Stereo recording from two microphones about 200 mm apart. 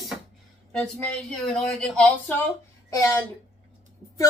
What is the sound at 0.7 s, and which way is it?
Speech, 5° left (ahead or behind).